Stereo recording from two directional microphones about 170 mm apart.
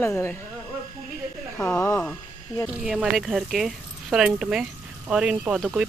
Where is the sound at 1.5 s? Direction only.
10° left (ahead or behind).